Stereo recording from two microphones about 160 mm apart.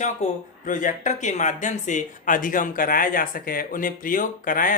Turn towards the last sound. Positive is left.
turn(degrees=60)  # may be behind; listen again after turning